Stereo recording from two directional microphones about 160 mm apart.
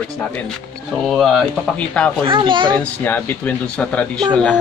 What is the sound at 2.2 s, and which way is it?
Speech, 30° right (ahead or behind).